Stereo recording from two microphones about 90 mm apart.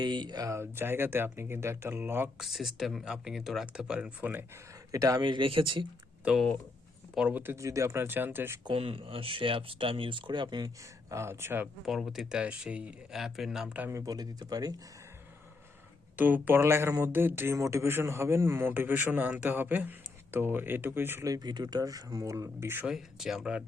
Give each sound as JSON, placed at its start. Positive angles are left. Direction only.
{"t": 0.0, "sound": "speech", "side_deg": -55}
{"t": 2.4, "sound": "speech", "side_deg": -5}
{"t": 4.9, "sound": "speech", "side_deg": -40}
{"t": 5.2, "sound": "speech", "side_deg": -65}
{"t": 7.2, "sound": "speech", "side_deg": -15}
{"t": 7.4, "sound": "speech", "side_deg": -35}
{"t": 8.6, "sound": "speech", "side_deg": -85}
{"t": 11.1, "sound": "speech", "side_deg": -30}
{"t": 11.9, "sound": "speech", "side_deg": 0}
{"t": 13.9, "sound": "speech", "side_deg": -45}
{"t": 16.1, "sound": "speech", "side_deg": -20}
{"t": 21.2, "sound": "speech", "side_deg": -50}
{"t": 22.9, "sound": "speech", "side_deg": -5}